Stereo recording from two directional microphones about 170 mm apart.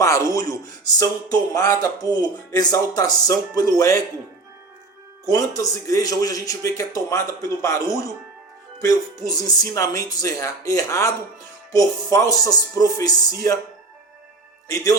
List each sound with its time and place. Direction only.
0.0 s a sound: 20° left (ahead or behind)
0.3 s speech: 20° left (ahead or behind)
5.3 s speech: 20° left (ahead or behind)